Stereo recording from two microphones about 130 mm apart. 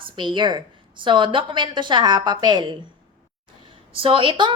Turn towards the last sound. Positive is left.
turn(degrees=-40)  # may be behind; listen again after turning